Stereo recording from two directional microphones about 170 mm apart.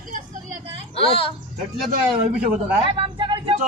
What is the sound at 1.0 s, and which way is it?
Speech, 35° left (ahead or behind).